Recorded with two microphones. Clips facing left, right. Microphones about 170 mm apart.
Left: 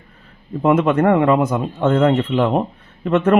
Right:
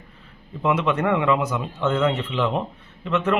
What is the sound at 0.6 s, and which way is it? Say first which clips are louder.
A man's voice: left 7 dB; 50° left (ahead or behind).